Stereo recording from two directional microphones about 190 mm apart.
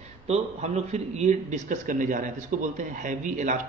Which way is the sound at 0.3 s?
35° right (ahead or behind).